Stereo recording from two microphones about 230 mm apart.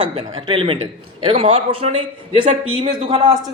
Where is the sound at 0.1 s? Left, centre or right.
Right.